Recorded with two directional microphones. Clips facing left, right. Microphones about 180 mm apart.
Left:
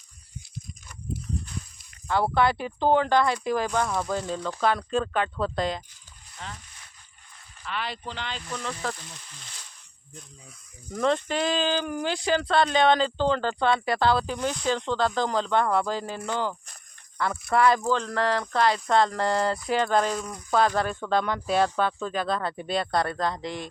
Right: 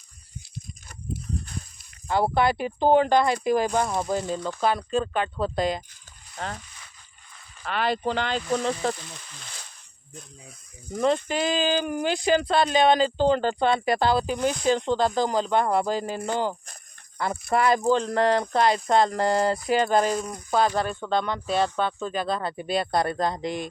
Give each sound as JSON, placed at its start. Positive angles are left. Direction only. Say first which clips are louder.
{"t": 2.0, "sound": "speech", "louder": "right 1 dB", "side_deg": -15}
{"t": 7.6, "sound": "speech", "louder": "right 8 dB", "side_deg": -45}
{"t": 8.4, "sound": "speech", "louder": "right 10 dB", "side_deg": -90}
{"t": 8.8, "sound": "speech", "louder": "right 5 dB", "side_deg": -25}
{"t": 10.9, "sound": "speech", "louder": "right 1 dB", "side_deg": -5}
{"t": 17.5, "sound": "speech", "louder": "right 1 dB", "side_deg": -15}